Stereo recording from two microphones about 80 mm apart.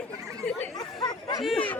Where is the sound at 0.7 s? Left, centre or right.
Left.